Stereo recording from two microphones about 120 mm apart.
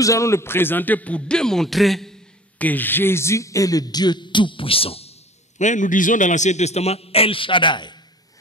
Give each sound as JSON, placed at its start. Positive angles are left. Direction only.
{"t": 0.0, "sound": "a man's voice", "side_deg": 25}
{"t": 2.6, "sound": "a man's voice", "side_deg": 15}
{"t": 5.6, "sound": "a man's voice", "side_deg": 90}